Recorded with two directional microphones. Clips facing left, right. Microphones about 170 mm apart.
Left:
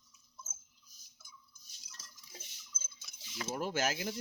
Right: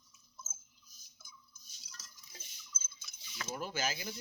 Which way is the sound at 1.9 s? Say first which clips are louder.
Left 2 dB; 25° left (ahead or behind).